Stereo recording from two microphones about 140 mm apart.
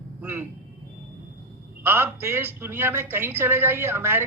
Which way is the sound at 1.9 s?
15° right (ahead or behind).